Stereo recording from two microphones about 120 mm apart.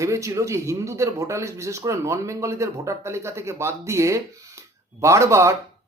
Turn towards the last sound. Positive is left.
turn(degrees=-25)  # may be behind; listen again after turning